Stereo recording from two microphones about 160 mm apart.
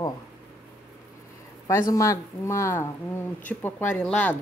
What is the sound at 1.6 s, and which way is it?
Speech, 20° left (ahead or behind).